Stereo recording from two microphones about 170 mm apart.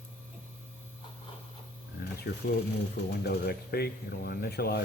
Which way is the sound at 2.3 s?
75° left (ahead or behind).